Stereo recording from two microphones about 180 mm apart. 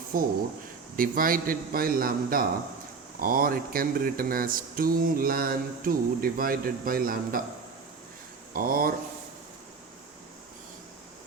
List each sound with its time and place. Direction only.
0.1 s speech: 50° right (ahead or behind)
8.5 s speech: 50° right (ahead or behind)